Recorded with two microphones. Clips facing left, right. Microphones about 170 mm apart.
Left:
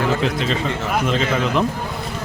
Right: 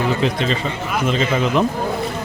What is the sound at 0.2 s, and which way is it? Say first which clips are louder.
Speech: right 1 dB; centre (ahead or behind).